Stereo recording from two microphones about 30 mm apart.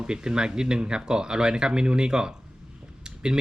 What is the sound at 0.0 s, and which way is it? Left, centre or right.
Speech, right.